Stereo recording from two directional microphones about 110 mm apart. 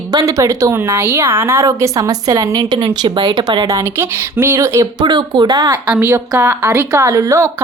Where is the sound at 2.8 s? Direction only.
50° right (ahead or behind).